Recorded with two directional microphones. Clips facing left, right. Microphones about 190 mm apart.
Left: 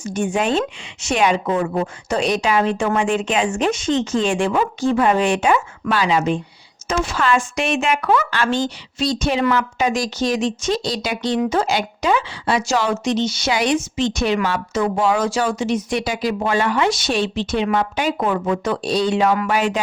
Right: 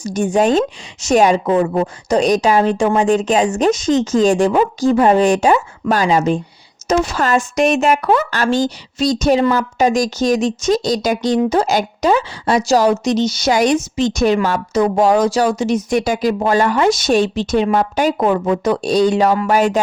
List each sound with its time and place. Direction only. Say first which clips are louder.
0.0 s a woman's voice: right 5 dB; 40° right (ahead or behind)